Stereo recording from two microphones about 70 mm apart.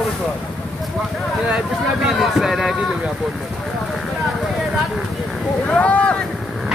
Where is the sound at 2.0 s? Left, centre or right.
Centre.